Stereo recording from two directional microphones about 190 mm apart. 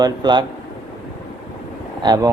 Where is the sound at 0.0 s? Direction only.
25° right (ahead or behind).